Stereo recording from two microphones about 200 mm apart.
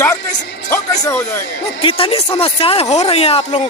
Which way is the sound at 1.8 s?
30° left (ahead or behind).